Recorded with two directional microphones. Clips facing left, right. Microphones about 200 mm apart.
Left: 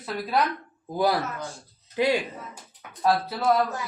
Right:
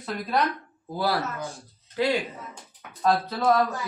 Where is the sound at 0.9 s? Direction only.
15° left (ahead or behind).